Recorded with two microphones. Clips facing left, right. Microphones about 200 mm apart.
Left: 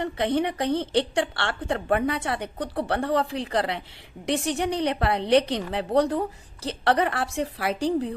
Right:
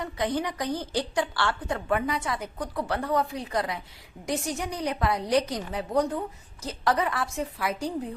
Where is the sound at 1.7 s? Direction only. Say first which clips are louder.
Left 5 dB; 30° left (ahead or behind).